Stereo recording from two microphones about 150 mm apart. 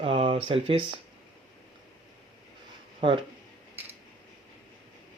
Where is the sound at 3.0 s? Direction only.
35° right (ahead or behind).